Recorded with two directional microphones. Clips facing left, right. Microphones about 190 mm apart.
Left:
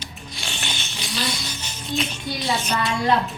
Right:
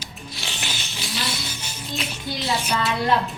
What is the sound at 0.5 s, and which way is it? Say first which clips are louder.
Music: left 1 dB; centre (ahead or behind).